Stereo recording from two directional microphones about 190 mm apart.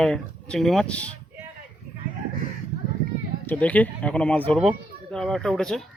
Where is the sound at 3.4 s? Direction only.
10° left (ahead or behind).